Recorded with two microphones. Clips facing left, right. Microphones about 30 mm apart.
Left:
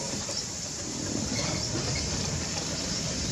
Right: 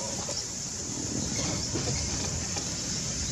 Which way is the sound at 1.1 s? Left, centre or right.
Left.